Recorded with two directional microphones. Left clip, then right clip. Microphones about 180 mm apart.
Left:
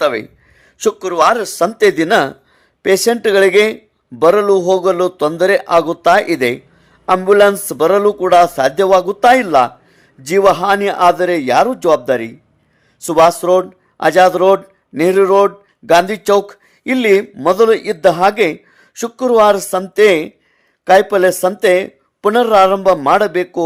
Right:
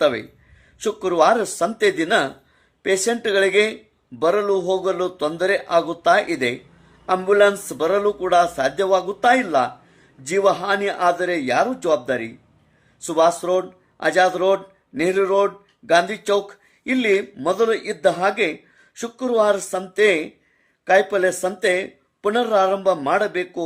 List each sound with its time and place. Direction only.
0.0 s a man's voice: 45° left (ahead or behind)